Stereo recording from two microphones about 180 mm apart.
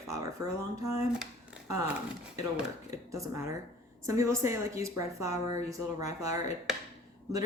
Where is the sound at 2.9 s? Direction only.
15° right (ahead or behind).